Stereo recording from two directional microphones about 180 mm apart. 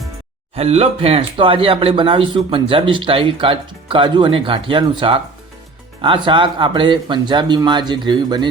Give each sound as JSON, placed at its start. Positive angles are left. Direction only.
{"t": 0.5, "sound": "speech", "side_deg": -35}